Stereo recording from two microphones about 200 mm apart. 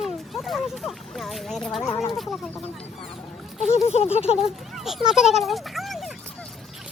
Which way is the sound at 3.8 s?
35° left (ahead or behind).